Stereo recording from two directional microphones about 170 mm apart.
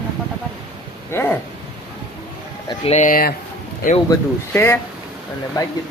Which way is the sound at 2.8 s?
40° left (ahead or behind).